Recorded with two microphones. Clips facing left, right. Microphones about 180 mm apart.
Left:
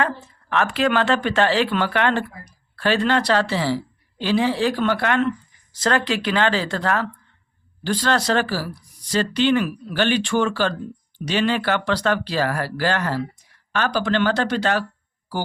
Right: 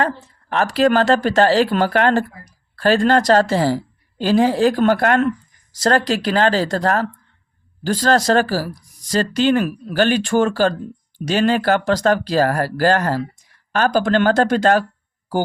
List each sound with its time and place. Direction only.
0.5 s speech: 35° right (ahead or behind)